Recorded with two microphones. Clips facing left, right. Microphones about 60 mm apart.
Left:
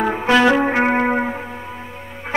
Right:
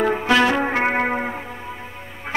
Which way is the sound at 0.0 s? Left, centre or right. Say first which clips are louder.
Left 2 dB; centre.